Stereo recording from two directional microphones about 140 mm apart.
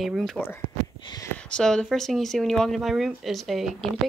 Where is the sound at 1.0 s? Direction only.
30° left (ahead or behind).